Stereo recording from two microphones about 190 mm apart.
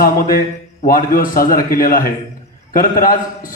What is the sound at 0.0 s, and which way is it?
A man's voice, 50° left (ahead or behind).